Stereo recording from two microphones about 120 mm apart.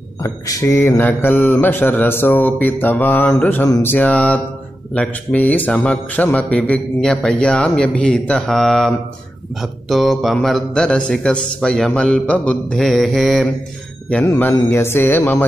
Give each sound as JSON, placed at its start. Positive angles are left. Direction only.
{"t": 0.2, "sound": "a man's voice", "side_deg": 25}
{"t": 14.2, "sound": "a man's voice", "side_deg": 25}